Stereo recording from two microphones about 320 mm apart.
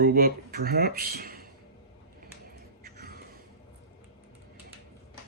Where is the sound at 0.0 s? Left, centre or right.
Right.